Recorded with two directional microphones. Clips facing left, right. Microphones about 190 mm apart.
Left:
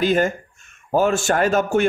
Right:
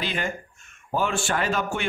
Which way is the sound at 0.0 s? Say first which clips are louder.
Left 11 dB; 45° left (ahead or behind).